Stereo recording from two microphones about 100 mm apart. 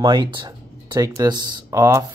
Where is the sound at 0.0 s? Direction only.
50° right (ahead or behind).